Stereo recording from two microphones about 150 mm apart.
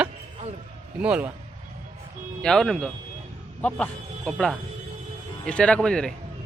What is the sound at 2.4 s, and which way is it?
Speech, 5° left (ahead or behind).